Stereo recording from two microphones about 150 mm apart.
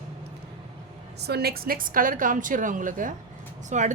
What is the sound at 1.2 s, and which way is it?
A woman's voice, 90° right.